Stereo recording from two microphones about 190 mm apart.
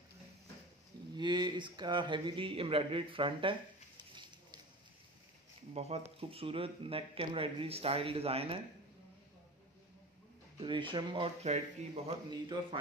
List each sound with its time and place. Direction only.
1.1 s speech: 20° right (ahead or behind)
4.1 s a sound: 25° right (ahead or behind)
5.8 s speech: 35° right (ahead or behind)
10.6 s speech: 25° right (ahead or behind)